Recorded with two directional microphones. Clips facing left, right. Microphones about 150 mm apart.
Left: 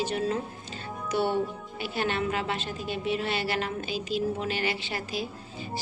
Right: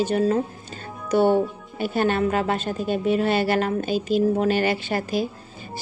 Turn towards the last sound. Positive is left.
turn(degrees=-50)  # may be behind; listen again after turning